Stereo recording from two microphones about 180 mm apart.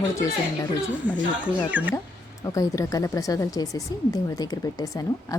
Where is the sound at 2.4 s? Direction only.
20° left (ahead or behind).